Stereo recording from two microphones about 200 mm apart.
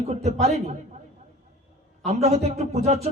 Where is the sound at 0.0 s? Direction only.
35° right (ahead or behind).